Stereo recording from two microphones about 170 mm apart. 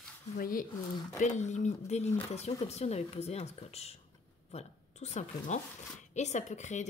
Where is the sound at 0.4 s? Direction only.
55° left (ahead or behind).